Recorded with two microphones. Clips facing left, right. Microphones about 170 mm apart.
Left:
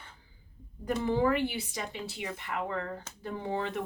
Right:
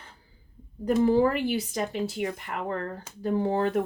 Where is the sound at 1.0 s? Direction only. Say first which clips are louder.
Right 3 dB; 35° right (ahead or behind).